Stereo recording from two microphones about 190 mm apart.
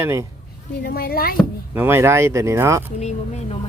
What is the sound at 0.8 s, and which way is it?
Speech, 55° left (ahead or behind).